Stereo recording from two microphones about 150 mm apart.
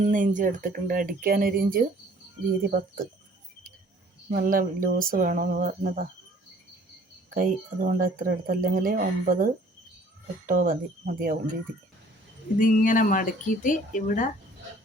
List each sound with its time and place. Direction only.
0.0 s speech: 60° right (ahead or behind)
4.3 s speech: 65° right (ahead or behind)
7.3 s speech: 65° right (ahead or behind)
12.5 s speech: 65° left (ahead or behind)